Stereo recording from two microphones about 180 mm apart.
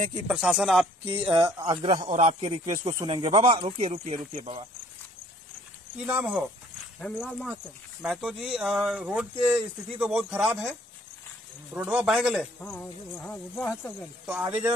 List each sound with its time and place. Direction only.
0.3 s speech: 5° right (ahead or behind)
1.2 s speech: 25° right (ahead or behind)
6.0 s speech: 5° right (ahead or behind)
7.0 s speech: 5° left (ahead or behind)
11.7 s speech: 10° right (ahead or behind)
12.5 s speech: 10° left (ahead or behind)
14.2 s speech: 10° right (ahead or behind)